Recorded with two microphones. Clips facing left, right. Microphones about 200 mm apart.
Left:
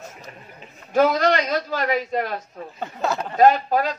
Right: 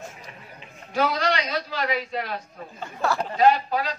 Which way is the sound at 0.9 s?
45° left (ahead or behind).